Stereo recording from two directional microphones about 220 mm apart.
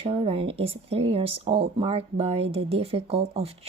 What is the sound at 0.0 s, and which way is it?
Speech, 25° right (ahead or behind).